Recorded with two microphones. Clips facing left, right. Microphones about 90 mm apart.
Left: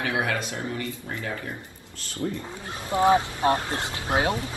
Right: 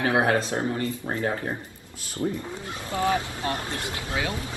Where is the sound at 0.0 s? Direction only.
35° right (ahead or behind).